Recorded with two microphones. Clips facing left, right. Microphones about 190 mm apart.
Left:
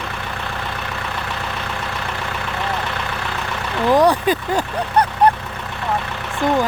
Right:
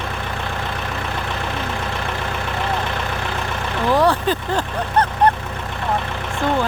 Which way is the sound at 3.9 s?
15° left (ahead or behind).